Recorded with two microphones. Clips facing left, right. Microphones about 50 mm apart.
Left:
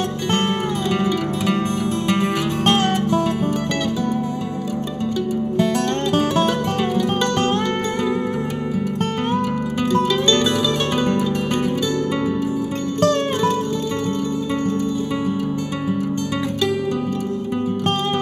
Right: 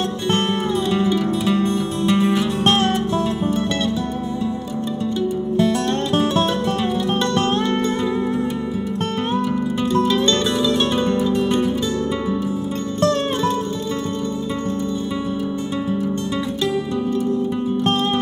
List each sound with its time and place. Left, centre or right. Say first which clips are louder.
1.5 s music: right 1 dB; left